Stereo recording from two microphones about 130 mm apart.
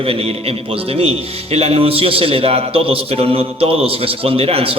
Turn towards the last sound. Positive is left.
turn(degrees=-50)  # may be behind; listen again after turning